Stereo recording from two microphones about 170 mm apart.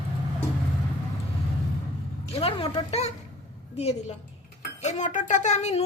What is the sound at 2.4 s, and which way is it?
A woman's voice, 30° left (ahead or behind).